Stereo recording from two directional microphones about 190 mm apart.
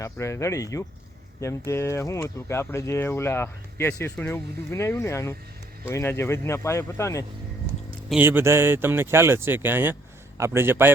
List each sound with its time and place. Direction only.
0.0 s speech: 15° left (ahead or behind)
8.1 s speech: 10° right (ahead or behind)